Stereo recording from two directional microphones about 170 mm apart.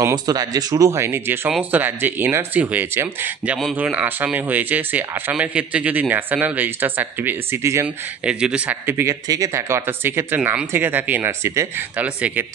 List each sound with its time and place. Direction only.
0.0 s speech: 20° right (ahead or behind)